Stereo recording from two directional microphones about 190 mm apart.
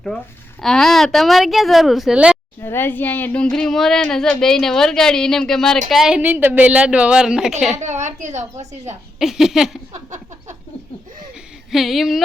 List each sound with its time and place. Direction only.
0.6 s speech: centre (ahead or behind)
2.6 s speech: 10° left (ahead or behind); by 7.5 s 5° right (ahead or behind)
7.8 s a woman's voice: 40° right (ahead or behind)
9.1 s speech: centre (ahead or behind)
11.7 s speech: centre (ahead or behind)